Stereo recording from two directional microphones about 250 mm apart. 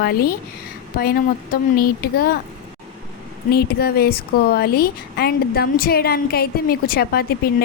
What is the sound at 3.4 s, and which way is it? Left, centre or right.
Speech, left.